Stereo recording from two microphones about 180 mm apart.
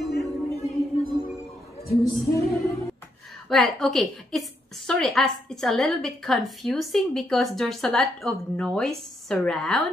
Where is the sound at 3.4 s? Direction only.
5° left (ahead or behind).